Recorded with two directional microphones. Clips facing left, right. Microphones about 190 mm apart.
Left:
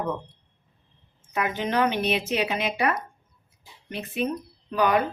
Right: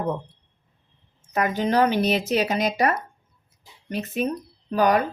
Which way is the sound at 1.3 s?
40° right (ahead or behind).